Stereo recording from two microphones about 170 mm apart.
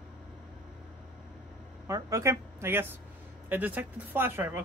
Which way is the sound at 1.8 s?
20° right (ahead or behind).